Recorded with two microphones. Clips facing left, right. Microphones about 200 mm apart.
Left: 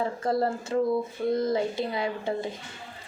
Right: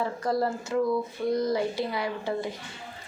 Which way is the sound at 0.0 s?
25° left (ahead or behind).